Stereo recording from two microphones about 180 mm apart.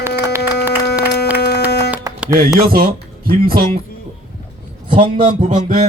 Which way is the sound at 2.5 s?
55° right (ahead or behind).